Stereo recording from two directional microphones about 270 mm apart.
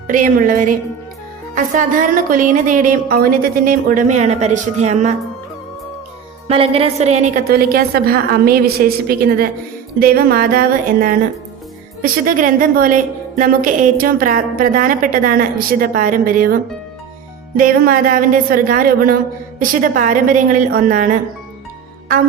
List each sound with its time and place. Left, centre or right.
0.1 s a woman's voice: right
6.5 s a woman's voice: right
17.6 s a woman's voice: right